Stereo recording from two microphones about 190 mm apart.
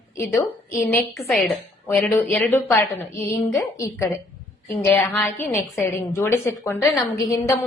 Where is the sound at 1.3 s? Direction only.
Centre (ahead or behind).